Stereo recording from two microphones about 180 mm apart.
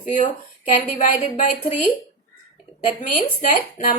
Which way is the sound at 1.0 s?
45° left (ahead or behind).